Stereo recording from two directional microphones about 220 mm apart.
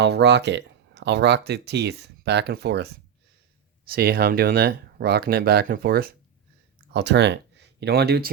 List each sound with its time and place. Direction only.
0.0 s speech: 50° right (ahead or behind)